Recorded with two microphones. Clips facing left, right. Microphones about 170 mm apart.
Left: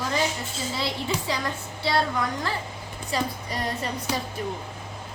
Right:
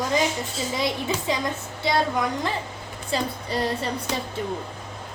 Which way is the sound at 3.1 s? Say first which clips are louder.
Right 2 dB; 30° right (ahead or behind).